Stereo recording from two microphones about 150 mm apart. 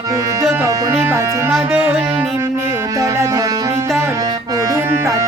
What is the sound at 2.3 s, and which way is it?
Music, 15° right (ahead or behind).